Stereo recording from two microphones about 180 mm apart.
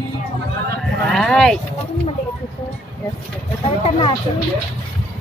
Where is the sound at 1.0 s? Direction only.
Centre (ahead or behind).